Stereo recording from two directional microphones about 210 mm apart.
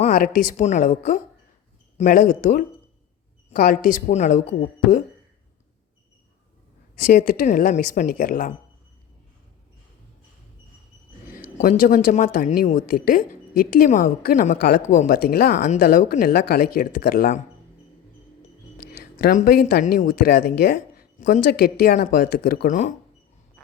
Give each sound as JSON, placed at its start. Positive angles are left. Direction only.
{"t": 0.0, "sound": "a woman's voice", "side_deg": 40}
{"t": 6.9, "sound": "a woman's voice", "side_deg": 40}
{"t": 11.3, "sound": "a woman's voice", "side_deg": 40}
{"t": 18.9, "sound": "a woman's voice", "side_deg": 40}